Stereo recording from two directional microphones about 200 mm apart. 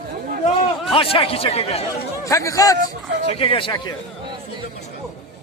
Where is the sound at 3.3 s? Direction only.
30° left (ahead or behind).